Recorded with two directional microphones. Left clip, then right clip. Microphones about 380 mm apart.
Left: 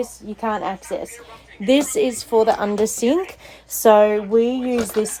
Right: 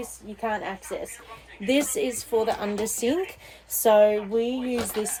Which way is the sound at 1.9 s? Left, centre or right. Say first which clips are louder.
Left 7 dB; centre.